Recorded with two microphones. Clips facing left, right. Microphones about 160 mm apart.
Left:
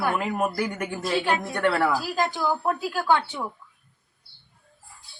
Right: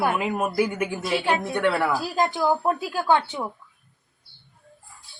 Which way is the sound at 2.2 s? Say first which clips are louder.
Right 3 dB; 20° right (ahead or behind).